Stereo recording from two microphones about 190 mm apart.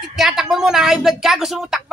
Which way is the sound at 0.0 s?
Centre (ahead or behind).